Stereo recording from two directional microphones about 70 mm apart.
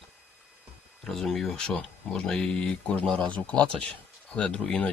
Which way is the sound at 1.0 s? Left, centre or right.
Centre.